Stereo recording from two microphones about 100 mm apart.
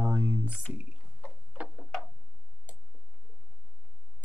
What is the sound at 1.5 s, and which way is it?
Tick-tock, 15° right (ahead or behind).